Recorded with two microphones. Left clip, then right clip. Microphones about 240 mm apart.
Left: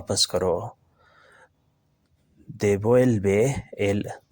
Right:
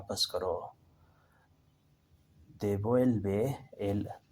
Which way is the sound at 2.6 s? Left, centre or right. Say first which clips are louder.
Left 10 dB; left.